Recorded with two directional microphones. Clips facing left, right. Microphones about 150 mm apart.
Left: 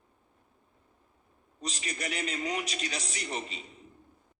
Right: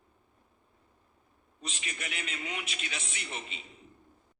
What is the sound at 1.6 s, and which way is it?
A man's voice, 40° left (ahead or behind).